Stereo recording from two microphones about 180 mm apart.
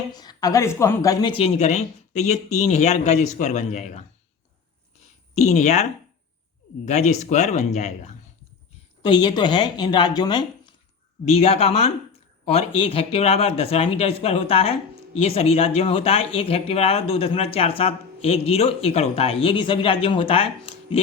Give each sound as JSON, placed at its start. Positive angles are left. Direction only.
{"t": 0.1, "sound": "speech", "side_deg": 20}
{"t": 5.3, "sound": "speech", "side_deg": 40}
{"t": 9.0, "sound": "speech", "side_deg": 25}
{"t": 11.3, "sound": "speech", "side_deg": 35}